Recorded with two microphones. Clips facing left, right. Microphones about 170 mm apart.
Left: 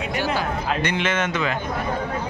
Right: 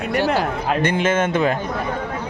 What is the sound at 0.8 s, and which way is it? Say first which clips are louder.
Speech: right 7 dB; 50° right (ahead or behind).